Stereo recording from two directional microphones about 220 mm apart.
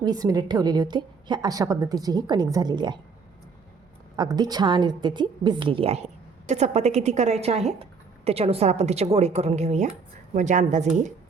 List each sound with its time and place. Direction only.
0.0 s a woman's voice: 15° right (ahead or behind)
4.2 s a woman's voice: 20° right (ahead or behind); by 11.1 s 35° right (ahead or behind)